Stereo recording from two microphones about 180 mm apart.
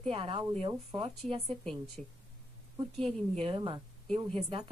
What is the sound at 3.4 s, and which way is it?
A woman's voice, 30° right (ahead or behind).